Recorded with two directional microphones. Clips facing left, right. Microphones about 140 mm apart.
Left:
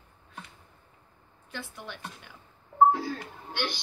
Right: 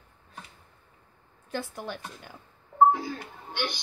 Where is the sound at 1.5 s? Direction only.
40° right (ahead or behind).